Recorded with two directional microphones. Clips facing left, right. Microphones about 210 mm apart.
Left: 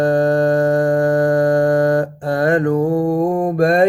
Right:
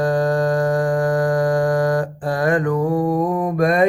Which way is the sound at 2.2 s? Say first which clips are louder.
Left 2 dB; 25° left (ahead or behind).